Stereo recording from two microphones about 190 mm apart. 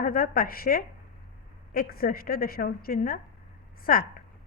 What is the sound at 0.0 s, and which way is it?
A woman's voice, 50° left (ahead or behind).